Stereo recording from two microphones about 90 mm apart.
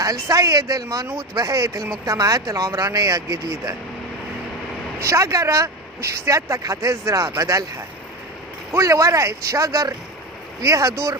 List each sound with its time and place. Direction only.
0.0 s speech: 40° right (ahead or behind)
4.9 s speech: 35° right (ahead or behind)
8.7 s speech: 35° right (ahead or behind)